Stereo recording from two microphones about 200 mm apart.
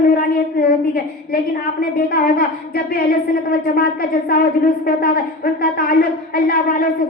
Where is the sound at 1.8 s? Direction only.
45° left (ahead or behind).